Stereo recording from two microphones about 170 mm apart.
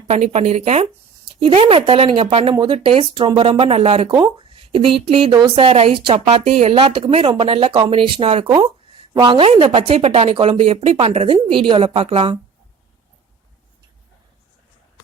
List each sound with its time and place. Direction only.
0.1 s a woman's voice: 40° right (ahead or behind)
4.1 s a woman's voice: 25° right (ahead or behind)